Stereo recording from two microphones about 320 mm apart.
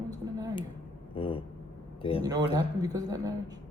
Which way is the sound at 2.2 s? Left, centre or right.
Centre.